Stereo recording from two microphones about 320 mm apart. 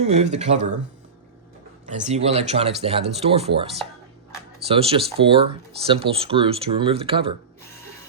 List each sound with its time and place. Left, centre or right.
0.0 s speech: centre
1.9 s speech: right
4.7 s speech: centre